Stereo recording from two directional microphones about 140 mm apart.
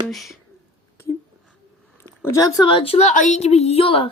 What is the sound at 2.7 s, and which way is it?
Speech, 40° left (ahead or behind).